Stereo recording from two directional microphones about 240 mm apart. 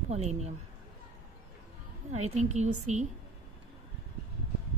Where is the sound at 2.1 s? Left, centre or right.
Right.